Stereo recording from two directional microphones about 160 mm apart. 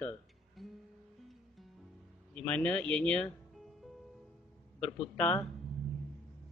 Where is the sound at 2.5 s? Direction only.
10° left (ahead or behind).